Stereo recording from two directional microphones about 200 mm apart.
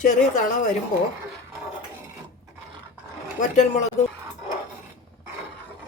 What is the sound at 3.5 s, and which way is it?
Speech, 35° left (ahead or behind).